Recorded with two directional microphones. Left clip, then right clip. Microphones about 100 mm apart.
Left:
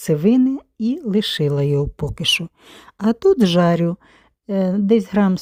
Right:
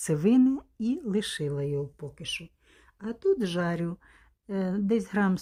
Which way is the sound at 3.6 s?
70° left (ahead or behind).